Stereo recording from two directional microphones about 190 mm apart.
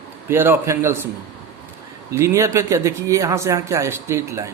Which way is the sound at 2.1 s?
15° right (ahead or behind).